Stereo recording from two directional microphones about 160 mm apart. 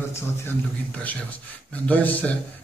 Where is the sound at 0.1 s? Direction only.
15° left (ahead or behind).